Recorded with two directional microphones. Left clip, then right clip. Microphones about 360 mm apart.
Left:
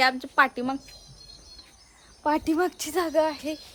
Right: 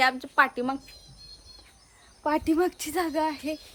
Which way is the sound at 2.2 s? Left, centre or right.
Centre.